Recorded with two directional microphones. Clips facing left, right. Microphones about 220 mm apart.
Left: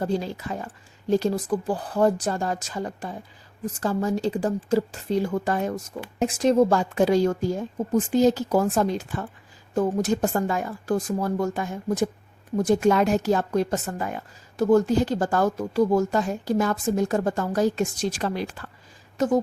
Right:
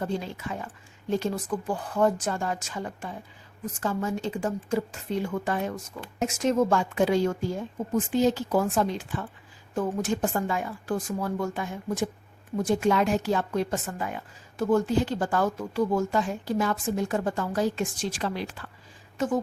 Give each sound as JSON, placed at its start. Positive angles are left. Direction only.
{"t": 0.0, "sound": "a woman's voice", "side_deg": 35}